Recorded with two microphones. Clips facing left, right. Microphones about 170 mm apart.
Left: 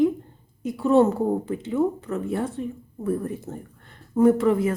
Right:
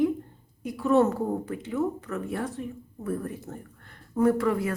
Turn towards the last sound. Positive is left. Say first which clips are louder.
# left 5 dB
turn(degrees=25)  # may be behind; listen again after turning